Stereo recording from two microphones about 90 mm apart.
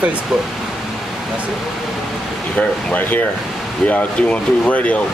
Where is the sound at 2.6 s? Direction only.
15° left (ahead or behind).